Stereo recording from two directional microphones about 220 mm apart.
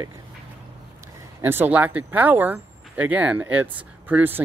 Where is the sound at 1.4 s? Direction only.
10° right (ahead or behind).